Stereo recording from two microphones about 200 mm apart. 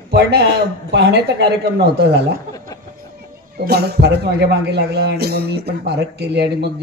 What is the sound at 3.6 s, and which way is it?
Speech, 55° right (ahead or behind).